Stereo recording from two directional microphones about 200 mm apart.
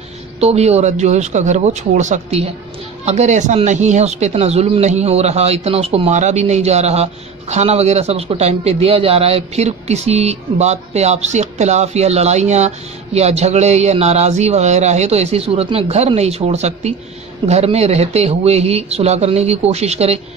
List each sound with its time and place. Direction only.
0.4 s speech: 30° right (ahead or behind)